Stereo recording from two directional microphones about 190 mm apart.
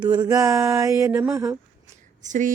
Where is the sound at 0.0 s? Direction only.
20° right (ahead or behind).